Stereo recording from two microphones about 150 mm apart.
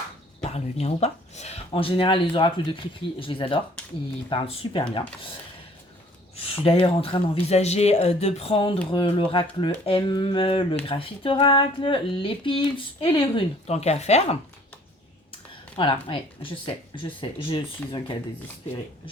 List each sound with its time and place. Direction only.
0.5 s speech: 45° left (ahead or behind)
6.3 s speech: 40° left (ahead or behind)
15.8 s speech: 35° left (ahead or behind)